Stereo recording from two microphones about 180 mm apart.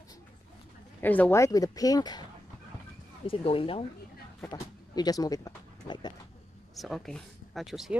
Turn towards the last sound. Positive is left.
turn(degrees=0)  # may be behind; listen again after turning